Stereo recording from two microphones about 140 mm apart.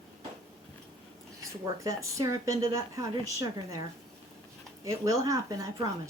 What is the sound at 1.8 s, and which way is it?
A woman's voice, 25° right (ahead or behind).